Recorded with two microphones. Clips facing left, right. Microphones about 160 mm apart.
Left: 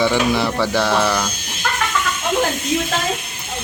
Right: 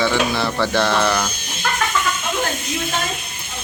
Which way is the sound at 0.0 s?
15° left (ahead or behind).